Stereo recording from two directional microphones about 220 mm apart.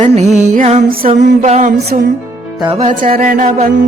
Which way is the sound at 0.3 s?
35° right (ahead or behind).